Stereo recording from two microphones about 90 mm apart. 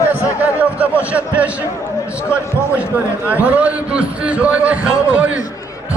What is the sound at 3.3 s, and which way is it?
A man's voice, 15° right (ahead or behind).